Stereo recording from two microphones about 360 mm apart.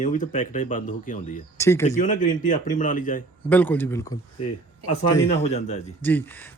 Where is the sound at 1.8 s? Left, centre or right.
Left.